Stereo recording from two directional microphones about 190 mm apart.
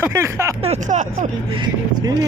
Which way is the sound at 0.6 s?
40° right (ahead or behind).